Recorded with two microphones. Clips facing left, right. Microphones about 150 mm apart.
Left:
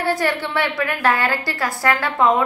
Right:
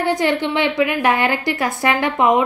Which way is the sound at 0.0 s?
20° right (ahead or behind).